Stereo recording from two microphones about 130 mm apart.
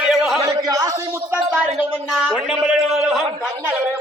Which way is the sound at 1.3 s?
10° right (ahead or behind).